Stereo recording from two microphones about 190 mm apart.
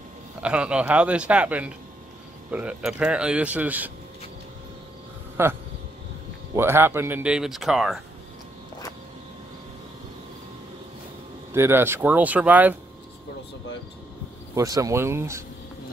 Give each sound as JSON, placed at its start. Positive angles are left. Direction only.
{"t": 0.4, "sound": "speech", "side_deg": -5}
{"t": 5.4, "sound": "speech", "side_deg": -15}
{"t": 11.5, "sound": "speech", "side_deg": -10}
{"t": 14.5, "sound": "speech", "side_deg": -15}